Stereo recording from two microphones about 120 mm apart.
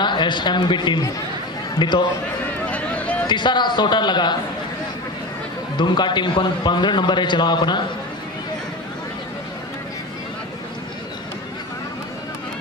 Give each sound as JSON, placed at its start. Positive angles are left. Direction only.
{"t": 0.0, "sound": "a man's voice", "side_deg": 40}
{"t": 2.7, "sound": "a sound", "side_deg": 10}
{"t": 3.3, "sound": "a man's voice", "side_deg": 40}
{"t": 5.8, "sound": "a man's voice", "side_deg": 40}